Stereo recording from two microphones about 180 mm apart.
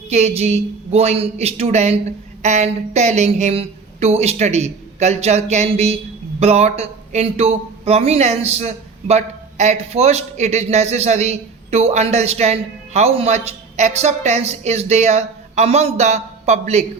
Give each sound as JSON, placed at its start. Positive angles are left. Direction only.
{"t": 0.1, "sound": "a man's voice", "side_deg": -40}